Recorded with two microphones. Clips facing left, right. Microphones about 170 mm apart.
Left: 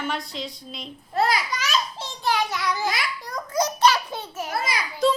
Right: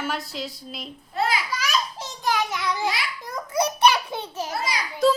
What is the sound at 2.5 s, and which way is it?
Speech, 15° right (ahead or behind).